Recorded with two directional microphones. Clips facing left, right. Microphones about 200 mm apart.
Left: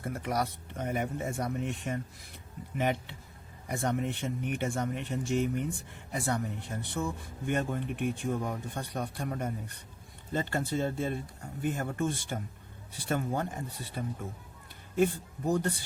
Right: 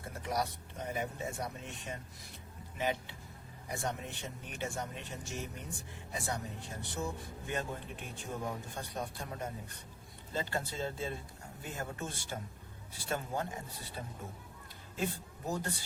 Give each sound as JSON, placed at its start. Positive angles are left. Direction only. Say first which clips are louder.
{"t": 0.1, "sound": "a man's voice", "louder": "left 3 dB", "side_deg": 60}
{"t": 14.9, "sound": "speech", "louder": "left 10 dB", "side_deg": 55}